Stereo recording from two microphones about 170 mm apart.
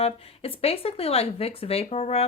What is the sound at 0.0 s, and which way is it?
Speech, 35° left (ahead or behind).